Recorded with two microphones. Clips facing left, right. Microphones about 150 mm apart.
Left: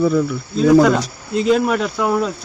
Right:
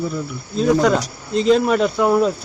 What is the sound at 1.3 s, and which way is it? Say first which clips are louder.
Speech: right 1 dB; 5° left (ahead or behind).